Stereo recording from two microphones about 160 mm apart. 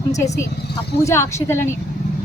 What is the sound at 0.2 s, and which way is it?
A woman's voice, 20° left (ahead or behind).